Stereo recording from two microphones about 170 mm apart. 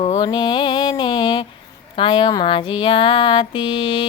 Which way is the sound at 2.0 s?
30° left (ahead or behind).